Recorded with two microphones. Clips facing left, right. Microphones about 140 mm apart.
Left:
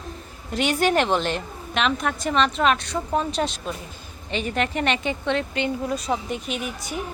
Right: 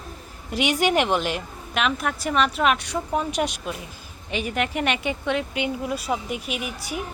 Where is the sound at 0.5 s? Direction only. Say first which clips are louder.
Even; 15° right (ahead or behind).